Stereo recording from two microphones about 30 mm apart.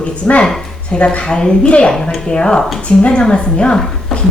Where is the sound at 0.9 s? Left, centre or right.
Left.